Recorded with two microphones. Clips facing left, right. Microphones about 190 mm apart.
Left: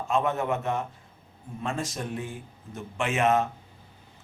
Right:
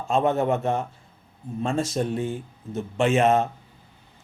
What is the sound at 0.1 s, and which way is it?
A man's voice, 30° right (ahead or behind).